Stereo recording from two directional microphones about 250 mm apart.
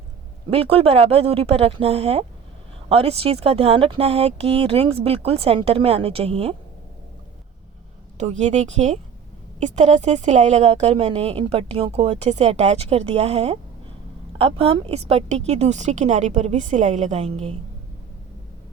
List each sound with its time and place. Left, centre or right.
0.5 s a woman's voice: right
8.2 s a woman's voice: right